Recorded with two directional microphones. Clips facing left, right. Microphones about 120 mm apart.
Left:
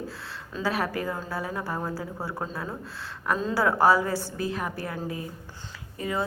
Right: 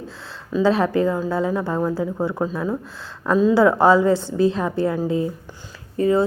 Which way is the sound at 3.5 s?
20° right (ahead or behind).